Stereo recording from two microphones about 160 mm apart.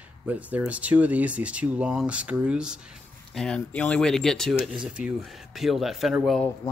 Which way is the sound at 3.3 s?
5° left (ahead or behind).